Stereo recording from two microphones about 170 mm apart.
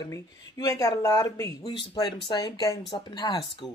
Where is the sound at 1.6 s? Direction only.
30° left (ahead or behind).